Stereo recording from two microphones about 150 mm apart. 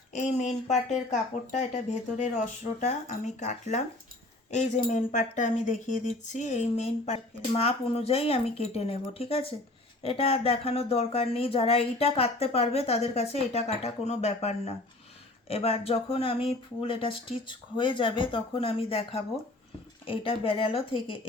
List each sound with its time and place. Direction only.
0.1 s speech: 55° left (ahead or behind); by 21.2 s 35° left (ahead or behind)